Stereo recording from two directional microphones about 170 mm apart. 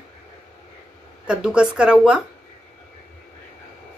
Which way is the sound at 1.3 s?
5° right (ahead or behind).